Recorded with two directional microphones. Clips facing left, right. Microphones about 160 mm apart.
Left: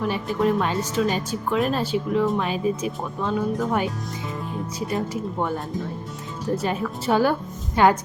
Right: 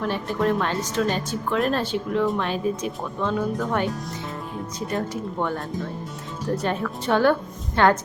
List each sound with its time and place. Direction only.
0.0 s speech: 5° left (ahead or behind)
6.6 s speech: 5° left (ahead or behind)